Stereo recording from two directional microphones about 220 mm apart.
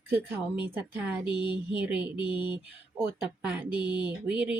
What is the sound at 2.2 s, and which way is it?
Speech, 20° left (ahead or behind).